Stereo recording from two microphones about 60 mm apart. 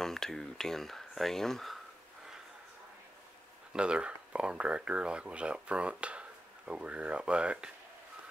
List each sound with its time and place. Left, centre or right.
0.0 s speech: centre
3.7 s speech: centre